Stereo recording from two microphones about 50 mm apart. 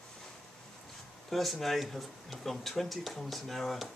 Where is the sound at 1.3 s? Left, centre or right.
Centre.